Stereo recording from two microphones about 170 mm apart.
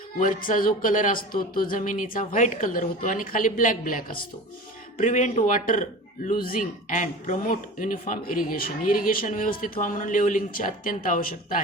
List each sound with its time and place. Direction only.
0.2 s speech: 55° left (ahead or behind)